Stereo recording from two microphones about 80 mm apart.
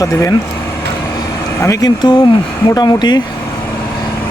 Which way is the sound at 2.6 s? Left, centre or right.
Left.